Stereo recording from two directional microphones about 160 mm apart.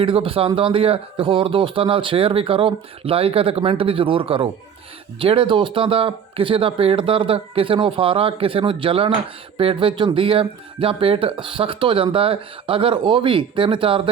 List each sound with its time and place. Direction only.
0.0 s speech: 35° right (ahead or behind)